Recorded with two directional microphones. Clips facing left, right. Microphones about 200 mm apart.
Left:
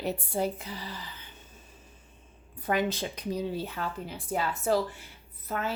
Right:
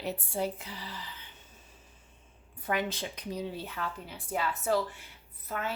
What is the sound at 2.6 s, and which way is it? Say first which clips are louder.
Speech: left 4 dB; 40° left (ahead or behind).